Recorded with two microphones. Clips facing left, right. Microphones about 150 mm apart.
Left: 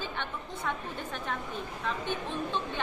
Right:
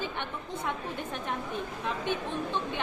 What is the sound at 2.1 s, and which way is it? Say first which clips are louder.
Speech: right 2 dB; 15° right (ahead or behind).